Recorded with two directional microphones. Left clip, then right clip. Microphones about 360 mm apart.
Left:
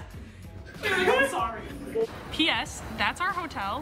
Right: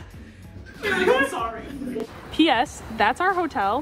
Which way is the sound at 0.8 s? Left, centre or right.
Centre.